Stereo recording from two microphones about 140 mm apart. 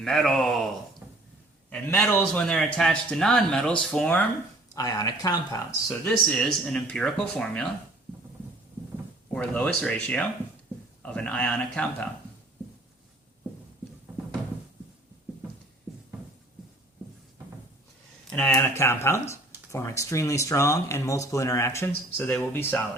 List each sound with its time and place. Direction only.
0.0 s a man's voice: centre (ahead or behind)
1.7 s a man's voice: 5° left (ahead or behind)
4.7 s speech: 25° left (ahead or behind)
6.1 s a man's voice: 5° left (ahead or behind)
9.3 s speech: 5° left (ahead or behind)
18.3 s a sound: 10° left (ahead or behind)
18.5 s speech: 20° left (ahead or behind)